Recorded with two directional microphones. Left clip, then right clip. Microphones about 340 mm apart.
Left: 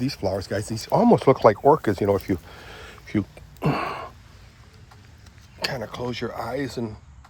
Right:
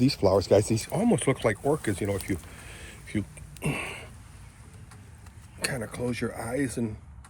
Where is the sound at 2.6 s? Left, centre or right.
Centre.